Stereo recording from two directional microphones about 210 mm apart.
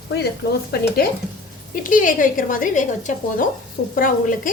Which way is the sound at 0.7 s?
45° left (ahead or behind).